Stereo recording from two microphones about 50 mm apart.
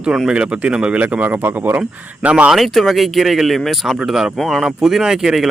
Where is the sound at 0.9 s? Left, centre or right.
Right.